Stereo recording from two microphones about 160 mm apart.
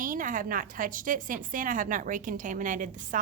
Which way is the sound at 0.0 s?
55° right (ahead or behind).